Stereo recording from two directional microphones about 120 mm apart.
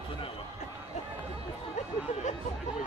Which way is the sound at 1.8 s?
90° left.